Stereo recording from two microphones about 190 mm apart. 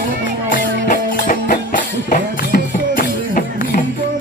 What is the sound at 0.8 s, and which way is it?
Music, 45° left (ahead or behind).